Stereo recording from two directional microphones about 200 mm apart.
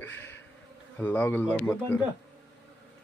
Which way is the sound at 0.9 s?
10° left (ahead or behind).